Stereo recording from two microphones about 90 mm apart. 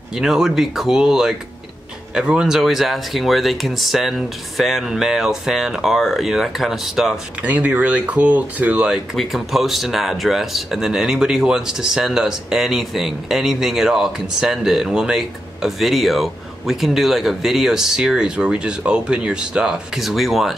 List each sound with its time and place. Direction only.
0.1 s speech: 5° right (ahead or behind)
7.4 s speech: 15° right (ahead or behind)
9.1 s speech: centre (ahead or behind)